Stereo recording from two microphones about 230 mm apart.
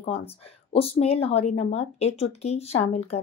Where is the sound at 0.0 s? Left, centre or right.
Left.